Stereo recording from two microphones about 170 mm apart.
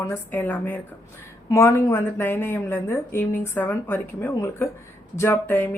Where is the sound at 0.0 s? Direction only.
10° left (ahead or behind).